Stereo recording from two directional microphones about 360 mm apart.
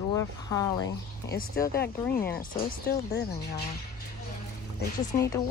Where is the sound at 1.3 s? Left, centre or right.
Left.